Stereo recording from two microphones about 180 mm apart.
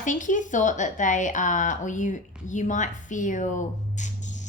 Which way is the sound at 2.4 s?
45° left (ahead or behind).